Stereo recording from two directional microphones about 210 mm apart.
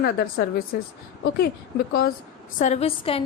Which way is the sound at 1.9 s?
45° left (ahead or behind).